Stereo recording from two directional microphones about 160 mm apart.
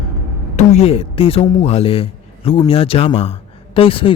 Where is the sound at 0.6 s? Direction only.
45° left (ahead or behind).